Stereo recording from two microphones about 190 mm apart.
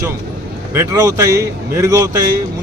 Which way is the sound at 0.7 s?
15° right (ahead or behind).